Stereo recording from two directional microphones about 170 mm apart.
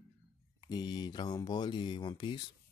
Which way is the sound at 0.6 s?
25° left (ahead or behind).